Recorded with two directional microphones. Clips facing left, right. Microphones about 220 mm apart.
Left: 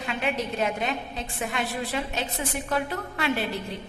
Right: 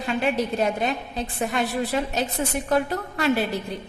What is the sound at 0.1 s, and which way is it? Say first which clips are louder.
A woman's voice: right 5 dB; 35° right (ahead or behind).